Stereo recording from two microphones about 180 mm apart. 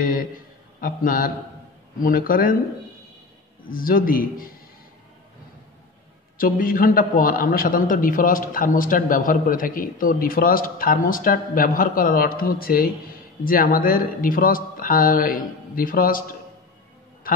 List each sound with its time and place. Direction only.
0.0 s a sound: 50° left (ahead or behind)
0.7 s a man's voice: 50° left (ahead or behind)
3.6 s a man's voice: 50° left (ahead or behind)
6.3 s a man's voice: 50° left (ahead or behind)